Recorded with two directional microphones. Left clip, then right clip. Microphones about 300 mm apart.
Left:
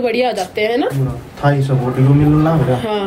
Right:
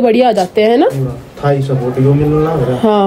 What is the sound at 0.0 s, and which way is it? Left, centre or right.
Speech, centre.